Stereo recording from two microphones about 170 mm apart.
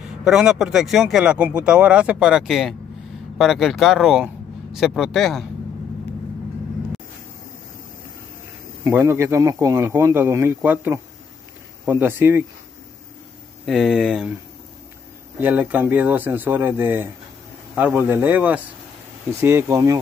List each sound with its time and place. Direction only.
0.2 s speech: 5° right (ahead or behind)
8.8 s speech: 15° right (ahead or behind)
13.7 s speech: centre (ahead or behind)
15.4 s speech: 10° right (ahead or behind)